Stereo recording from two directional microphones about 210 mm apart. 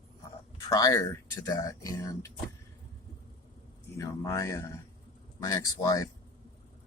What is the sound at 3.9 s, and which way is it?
Speech, 15° left (ahead or behind).